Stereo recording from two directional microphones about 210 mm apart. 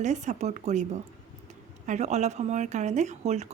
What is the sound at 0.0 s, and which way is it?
Speech, 35° right (ahead or behind).